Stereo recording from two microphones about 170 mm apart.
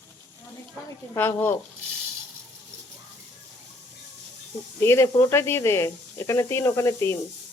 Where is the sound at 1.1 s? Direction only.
15° left (ahead or behind).